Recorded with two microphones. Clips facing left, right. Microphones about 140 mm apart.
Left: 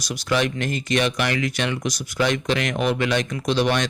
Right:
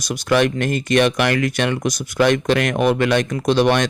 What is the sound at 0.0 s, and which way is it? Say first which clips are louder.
Speech: right 5 dB; 55° right (ahead or behind).